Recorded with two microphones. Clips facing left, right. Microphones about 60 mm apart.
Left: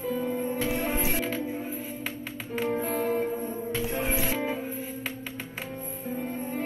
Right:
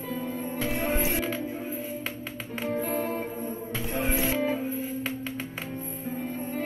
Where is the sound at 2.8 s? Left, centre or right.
Centre.